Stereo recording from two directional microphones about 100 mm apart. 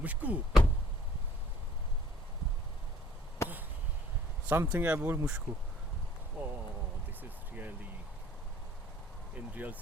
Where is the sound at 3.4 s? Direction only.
30° left (ahead or behind).